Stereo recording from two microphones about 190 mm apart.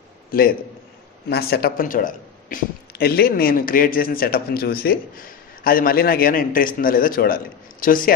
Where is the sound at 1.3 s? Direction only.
55° left (ahead or behind).